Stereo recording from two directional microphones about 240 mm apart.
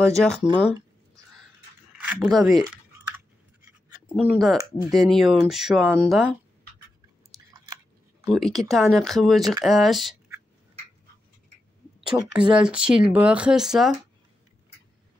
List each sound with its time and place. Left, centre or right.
0.0 s speech: centre
2.0 s speech: centre
4.2 s speech: centre
8.3 s speech: centre
12.1 s speech: centre